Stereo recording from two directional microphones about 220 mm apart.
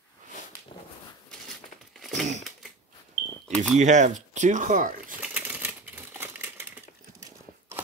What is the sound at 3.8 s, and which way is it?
Speech, 35° right (ahead or behind).